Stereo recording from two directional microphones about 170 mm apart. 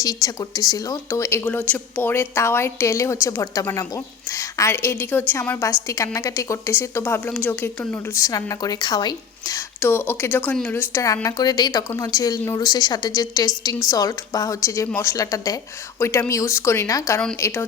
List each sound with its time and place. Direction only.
0.0 s a woman's voice: 20° left (ahead or behind)